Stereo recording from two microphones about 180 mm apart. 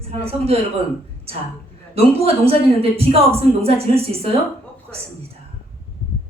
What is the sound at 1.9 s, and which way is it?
A woman's voice, 35° right (ahead or behind).